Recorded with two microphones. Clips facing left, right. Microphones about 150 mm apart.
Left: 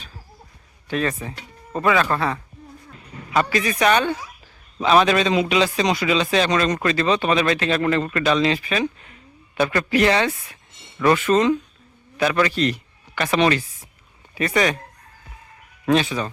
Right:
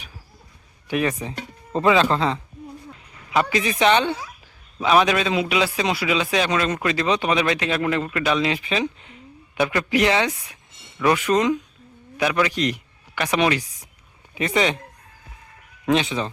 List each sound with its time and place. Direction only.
0.9 s a man's voice: 15° right (ahead or behind)
4.8 s a man's voice: 10° right (ahead or behind)
8.6 s a man's voice: 20° right (ahead or behind)
15.9 s speech: 20° right (ahead or behind)